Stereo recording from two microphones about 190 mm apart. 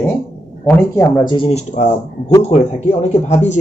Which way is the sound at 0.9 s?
20° left (ahead or behind).